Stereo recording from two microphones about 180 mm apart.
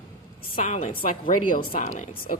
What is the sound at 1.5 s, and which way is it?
Speech, 45° left (ahead or behind).